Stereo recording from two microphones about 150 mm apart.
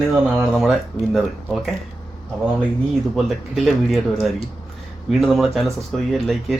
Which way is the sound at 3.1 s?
Centre (ahead or behind).